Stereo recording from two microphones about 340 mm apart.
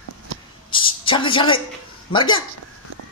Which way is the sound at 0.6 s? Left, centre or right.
Centre.